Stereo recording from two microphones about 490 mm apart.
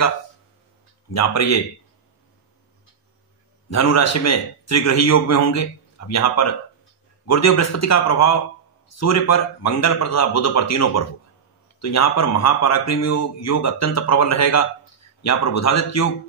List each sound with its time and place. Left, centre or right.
1.1 s speech: left
3.7 s speech: left